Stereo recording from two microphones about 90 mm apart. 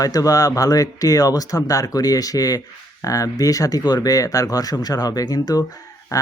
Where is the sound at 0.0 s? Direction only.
40° left (ahead or behind).